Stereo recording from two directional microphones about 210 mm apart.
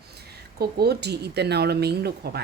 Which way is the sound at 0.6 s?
50° right (ahead or behind).